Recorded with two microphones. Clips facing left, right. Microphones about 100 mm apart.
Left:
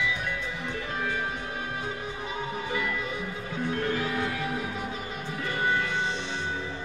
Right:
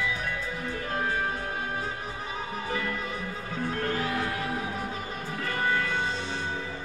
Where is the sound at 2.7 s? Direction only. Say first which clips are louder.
Right 1 dB; 40° right (ahead or behind).